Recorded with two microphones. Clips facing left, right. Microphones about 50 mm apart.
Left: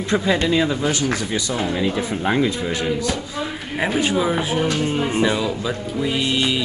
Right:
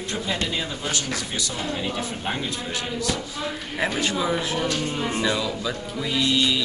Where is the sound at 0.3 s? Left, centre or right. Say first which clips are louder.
Left 9 dB; left.